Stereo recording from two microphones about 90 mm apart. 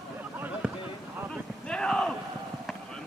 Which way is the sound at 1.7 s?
10° left (ahead or behind).